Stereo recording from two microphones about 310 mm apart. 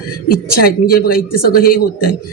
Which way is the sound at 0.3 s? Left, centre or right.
Left.